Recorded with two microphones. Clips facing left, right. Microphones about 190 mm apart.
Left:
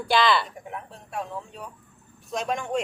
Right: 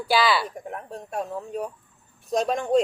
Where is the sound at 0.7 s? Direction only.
45° right (ahead or behind).